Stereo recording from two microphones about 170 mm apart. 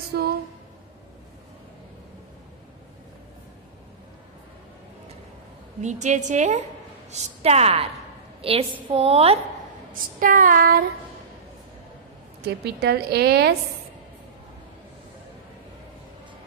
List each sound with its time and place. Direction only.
0.1 s a sound: 65° right (ahead or behind)
5.8 s child singing: 45° right (ahead or behind)
7.1 s a woman's voice: 40° right (ahead or behind)
9.9 s child singing: 50° right (ahead or behind)
12.4 s a woman's voice: 70° right (ahead or behind)